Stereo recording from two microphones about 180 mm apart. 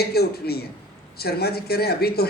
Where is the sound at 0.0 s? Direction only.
60° left (ahead or behind).